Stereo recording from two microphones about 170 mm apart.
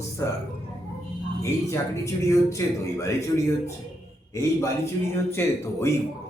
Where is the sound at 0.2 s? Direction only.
15° left (ahead or behind).